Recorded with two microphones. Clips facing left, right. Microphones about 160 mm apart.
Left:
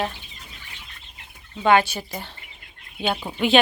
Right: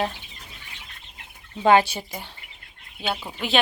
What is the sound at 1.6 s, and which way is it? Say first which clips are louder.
Speech: right 1 dB; 30° right (ahead or behind).